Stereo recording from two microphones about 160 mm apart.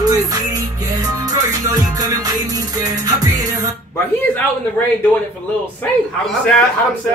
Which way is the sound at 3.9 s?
10° left (ahead or behind).